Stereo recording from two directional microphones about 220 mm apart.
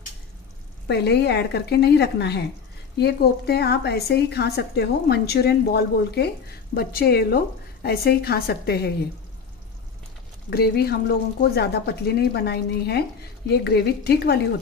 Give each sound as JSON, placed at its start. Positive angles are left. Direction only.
{"t": 0.8, "sound": "a woman's voice", "side_deg": 50}
{"t": 10.5, "sound": "a woman's voice", "side_deg": 45}